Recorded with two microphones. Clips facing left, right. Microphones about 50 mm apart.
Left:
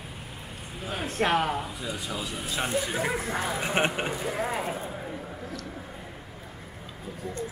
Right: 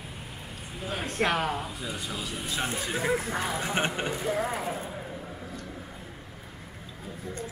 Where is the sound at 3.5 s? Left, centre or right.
Left.